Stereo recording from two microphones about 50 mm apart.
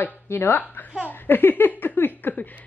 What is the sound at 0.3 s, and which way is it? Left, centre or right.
Speech, left.